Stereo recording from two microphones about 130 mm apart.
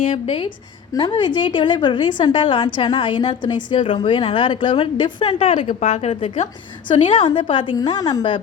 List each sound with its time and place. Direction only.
0.1 s a woman's voice: 45° left (ahead or behind)
5.6 s a woman's voice: 60° left (ahead or behind); by 8.4 s 35° left (ahead or behind)